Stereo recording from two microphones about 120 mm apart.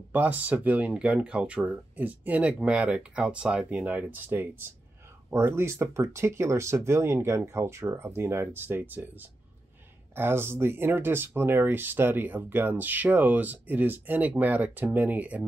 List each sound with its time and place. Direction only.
0.1 s speech: 15° right (ahead or behind)